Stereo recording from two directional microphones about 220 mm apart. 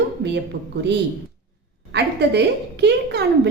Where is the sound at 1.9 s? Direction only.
50° right (ahead or behind).